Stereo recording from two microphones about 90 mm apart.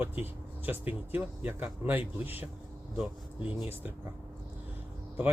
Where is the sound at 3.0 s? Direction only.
5° right (ahead or behind).